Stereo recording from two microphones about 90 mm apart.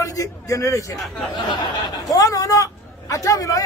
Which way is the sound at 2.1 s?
40° left (ahead or behind).